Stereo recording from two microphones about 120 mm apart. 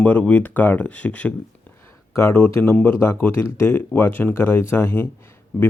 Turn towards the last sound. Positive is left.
turn(degrees=20)  # may be behind; listen again after turning